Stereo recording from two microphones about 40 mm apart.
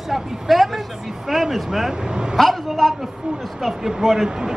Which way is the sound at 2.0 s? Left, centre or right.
Centre.